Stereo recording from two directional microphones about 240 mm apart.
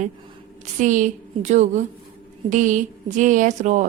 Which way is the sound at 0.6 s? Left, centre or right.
Right.